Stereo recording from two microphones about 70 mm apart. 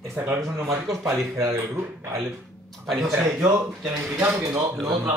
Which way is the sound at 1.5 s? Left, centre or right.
Right.